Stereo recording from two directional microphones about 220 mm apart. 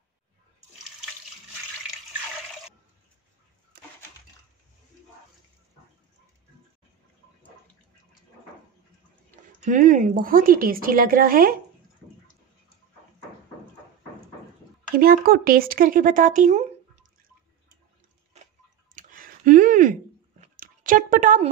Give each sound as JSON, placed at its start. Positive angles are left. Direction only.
{"t": 9.6, "sound": "speech", "side_deg": -35}
{"t": 15.0, "sound": "speech", "side_deg": -40}
{"t": 18.9, "sound": "a sound", "side_deg": -40}